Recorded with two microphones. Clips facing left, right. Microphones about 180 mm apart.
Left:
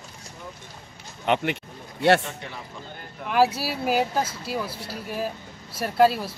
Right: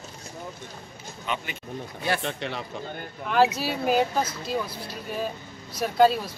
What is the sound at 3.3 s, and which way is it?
Speech, 5° left (ahead or behind).